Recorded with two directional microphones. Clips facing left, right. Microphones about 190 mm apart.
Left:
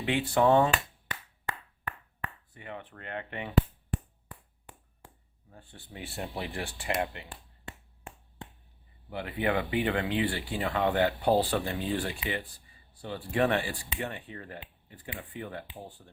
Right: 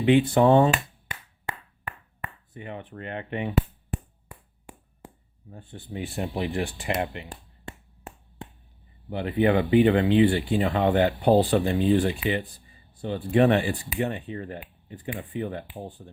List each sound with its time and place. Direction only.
0.0 s speech: 20° right (ahead or behind)
2.5 s speech: 20° right (ahead or behind)
4.3 s a sound: 10° right (ahead or behind)
5.5 s speech: 20° right (ahead or behind)
9.0 s speech: 25° right (ahead or behind)